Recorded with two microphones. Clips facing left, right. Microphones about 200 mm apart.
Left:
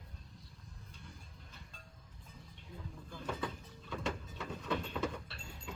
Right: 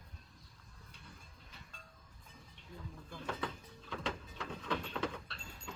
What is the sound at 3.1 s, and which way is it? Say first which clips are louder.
Vehicle: left 1 dB; 5° left (ahead or behind).